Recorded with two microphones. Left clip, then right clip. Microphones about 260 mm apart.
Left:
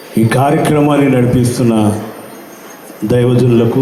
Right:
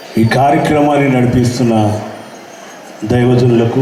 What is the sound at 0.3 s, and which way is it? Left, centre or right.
A man's voice, left.